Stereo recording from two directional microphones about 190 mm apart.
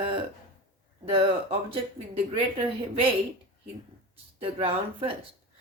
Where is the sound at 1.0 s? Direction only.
30° right (ahead or behind).